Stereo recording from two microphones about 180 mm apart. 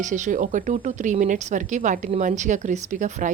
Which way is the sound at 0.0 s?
45° right (ahead or behind).